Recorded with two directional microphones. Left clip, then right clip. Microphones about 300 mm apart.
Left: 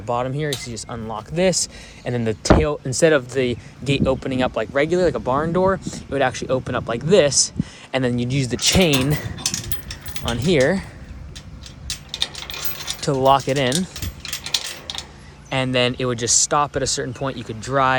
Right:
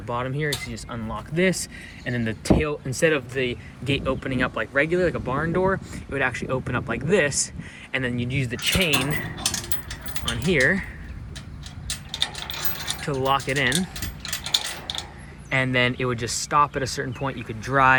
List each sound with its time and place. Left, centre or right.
0.1 s speech: centre
10.2 s speech: centre
12.9 s speech: centre
14.2 s a sound: centre
15.4 s speech: centre